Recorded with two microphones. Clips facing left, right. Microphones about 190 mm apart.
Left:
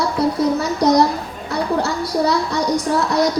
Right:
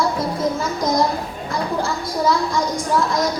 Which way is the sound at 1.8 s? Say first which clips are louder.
Left 3 dB; 70° left (ahead or behind).